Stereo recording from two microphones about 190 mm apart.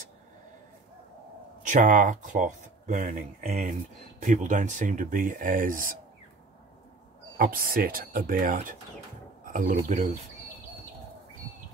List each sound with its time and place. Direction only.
1.7 s speech: 40° right (ahead or behind)
7.3 s speech: 50° right (ahead or behind)